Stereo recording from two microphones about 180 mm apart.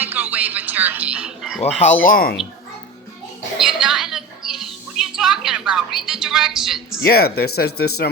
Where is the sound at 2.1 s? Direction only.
55° left (ahead or behind).